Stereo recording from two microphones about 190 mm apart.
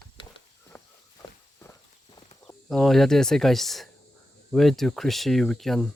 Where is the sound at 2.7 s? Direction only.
Centre (ahead or behind).